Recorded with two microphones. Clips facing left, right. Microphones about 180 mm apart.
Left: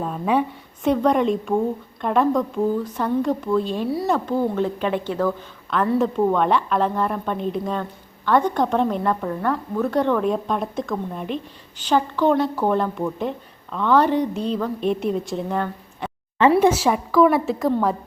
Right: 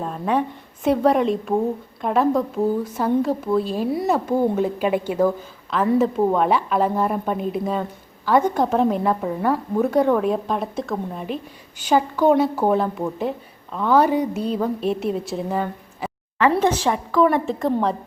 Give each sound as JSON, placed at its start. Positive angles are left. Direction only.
{"t": 0.0, "sound": "a woman's voice", "side_deg": 5}
{"t": 16.6, "sound": "a woman's voice", "side_deg": 10}